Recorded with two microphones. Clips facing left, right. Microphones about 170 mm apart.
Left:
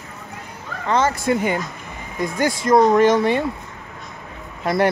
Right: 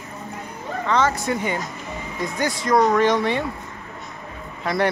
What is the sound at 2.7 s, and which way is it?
Speech, 25° left (ahead or behind).